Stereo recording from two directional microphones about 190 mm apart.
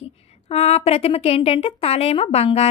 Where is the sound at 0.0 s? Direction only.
35° left (ahead or behind).